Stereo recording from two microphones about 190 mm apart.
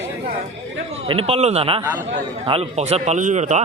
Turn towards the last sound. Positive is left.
turn(degrees=-40)  # may be behind; listen again after turning